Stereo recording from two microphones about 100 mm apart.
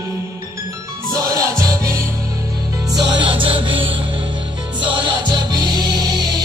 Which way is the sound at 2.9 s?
55° right (ahead or behind).